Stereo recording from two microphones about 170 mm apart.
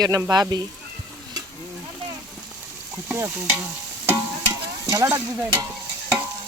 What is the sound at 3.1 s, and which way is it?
Speech, 10° right (ahead or behind).